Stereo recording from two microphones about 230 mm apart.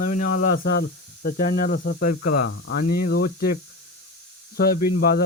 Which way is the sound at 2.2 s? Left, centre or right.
Left.